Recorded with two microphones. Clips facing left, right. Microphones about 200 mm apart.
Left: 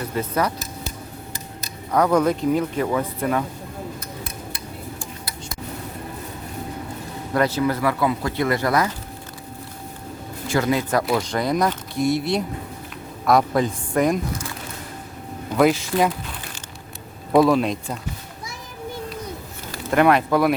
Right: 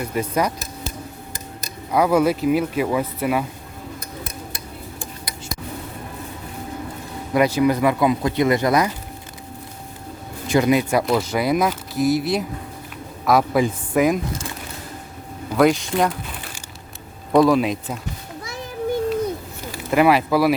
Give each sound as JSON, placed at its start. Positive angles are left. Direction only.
{"t": 0.0, "sound": "speech", "side_deg": -15}
{"t": 1.9, "sound": "speech", "side_deg": -10}
{"t": 7.3, "sound": "speech", "side_deg": -15}
{"t": 10.5, "sound": "speech", "side_deg": -15}
{"t": 11.0, "sound": "speech", "side_deg": -5}
{"t": 15.5, "sound": "speech", "side_deg": 0}
{"t": 17.3, "sound": "speech", "side_deg": 0}
{"t": 19.9, "sound": "speech", "side_deg": -5}